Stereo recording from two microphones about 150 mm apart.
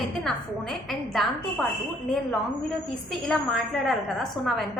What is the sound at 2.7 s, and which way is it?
A woman's voice, centre (ahead or behind).